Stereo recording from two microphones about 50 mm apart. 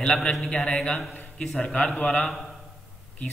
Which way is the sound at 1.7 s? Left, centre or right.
Left.